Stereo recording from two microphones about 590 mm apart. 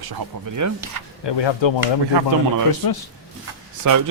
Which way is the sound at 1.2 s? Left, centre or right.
Left.